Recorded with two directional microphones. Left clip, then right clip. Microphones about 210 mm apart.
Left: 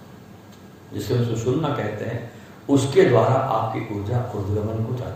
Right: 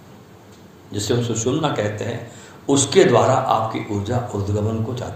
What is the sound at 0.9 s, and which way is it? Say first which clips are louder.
Speech: right 3 dB; 35° right (ahead or behind).